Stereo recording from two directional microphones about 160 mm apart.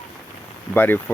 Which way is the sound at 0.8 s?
15° left (ahead or behind).